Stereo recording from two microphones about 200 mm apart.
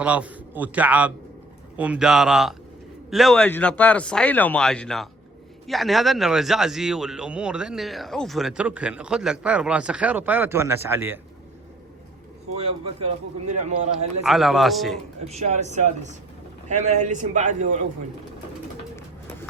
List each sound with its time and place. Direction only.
0.0 s a man's voice: 5° right (ahead or behind)
12.5 s a man's voice: 30° right (ahead or behind)
14.3 s a man's voice: centre (ahead or behind)
15.3 s a man's voice: 35° right (ahead or behind)